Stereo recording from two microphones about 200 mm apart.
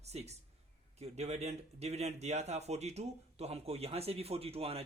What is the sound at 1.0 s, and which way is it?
Speech, 30° right (ahead or behind).